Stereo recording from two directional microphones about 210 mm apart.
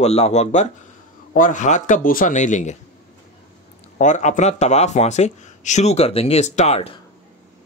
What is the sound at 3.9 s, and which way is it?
Speech, 35° left (ahead or behind).